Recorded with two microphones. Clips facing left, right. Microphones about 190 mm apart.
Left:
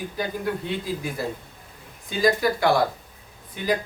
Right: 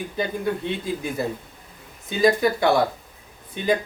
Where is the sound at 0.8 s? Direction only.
25° right (ahead or behind).